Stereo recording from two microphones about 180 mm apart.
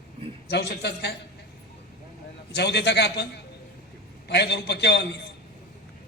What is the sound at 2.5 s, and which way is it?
A man's voice, 70° left (ahead or behind).